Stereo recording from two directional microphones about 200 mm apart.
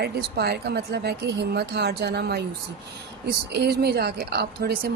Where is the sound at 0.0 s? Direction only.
55° right (ahead or behind).